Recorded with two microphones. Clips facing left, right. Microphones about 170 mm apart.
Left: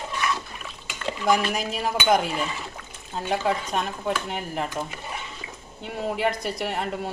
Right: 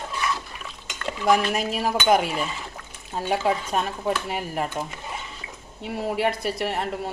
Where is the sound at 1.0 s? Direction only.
Centre (ahead or behind).